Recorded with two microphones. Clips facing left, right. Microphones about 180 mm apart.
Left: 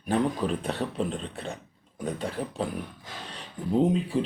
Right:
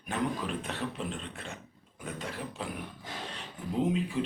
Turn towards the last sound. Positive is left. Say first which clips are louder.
# left 5 dB
turn(degrees=35)  # may be behind; listen again after turning